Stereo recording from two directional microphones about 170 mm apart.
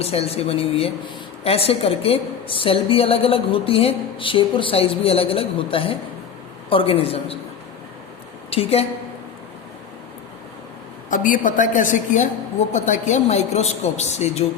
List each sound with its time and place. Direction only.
0.0 s a woman's voice: 35° left (ahead or behind)
8.4 s a woman's voice: 35° left (ahead or behind)
11.1 s a woman's voice: 50° left (ahead or behind)